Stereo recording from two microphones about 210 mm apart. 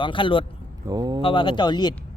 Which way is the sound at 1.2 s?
25° left (ahead or behind).